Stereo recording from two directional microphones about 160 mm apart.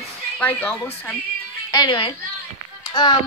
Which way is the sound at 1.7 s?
25° left (ahead or behind).